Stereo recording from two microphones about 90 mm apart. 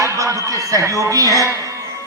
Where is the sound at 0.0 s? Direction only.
35° right (ahead or behind).